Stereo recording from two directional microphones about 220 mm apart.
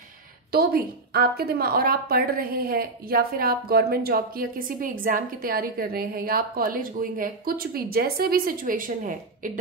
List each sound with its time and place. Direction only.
0.5 s a woman's voice: 45° right (ahead or behind)